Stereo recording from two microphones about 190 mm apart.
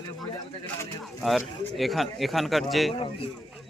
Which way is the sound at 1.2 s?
Centre (ahead or behind).